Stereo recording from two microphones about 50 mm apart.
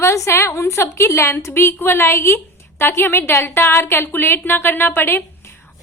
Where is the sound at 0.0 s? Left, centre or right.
Left.